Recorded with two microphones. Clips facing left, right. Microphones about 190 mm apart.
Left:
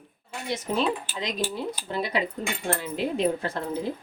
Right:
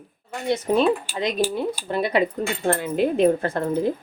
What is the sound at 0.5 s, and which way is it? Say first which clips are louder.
Speech: right 7 dB; 55° right (ahead or behind).